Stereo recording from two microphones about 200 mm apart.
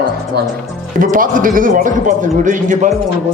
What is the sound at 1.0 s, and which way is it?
Speech, 40° right (ahead or behind).